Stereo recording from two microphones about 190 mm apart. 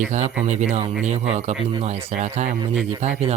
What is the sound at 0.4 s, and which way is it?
Speech, 35° right (ahead or behind).